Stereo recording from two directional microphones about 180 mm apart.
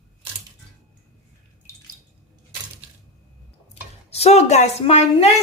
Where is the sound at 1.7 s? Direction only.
15° left (ahead or behind).